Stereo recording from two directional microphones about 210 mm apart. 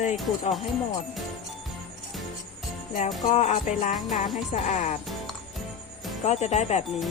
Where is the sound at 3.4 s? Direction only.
30° left (ahead or behind).